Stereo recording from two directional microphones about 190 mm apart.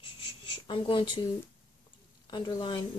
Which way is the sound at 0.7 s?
25° left (ahead or behind).